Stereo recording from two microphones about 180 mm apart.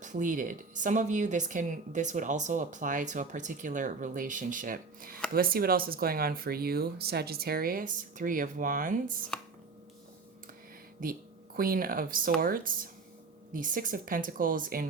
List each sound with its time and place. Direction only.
0.0 s a woman's voice: 45° right (ahead or behind)
11.0 s a woman's voice: 55° right (ahead or behind)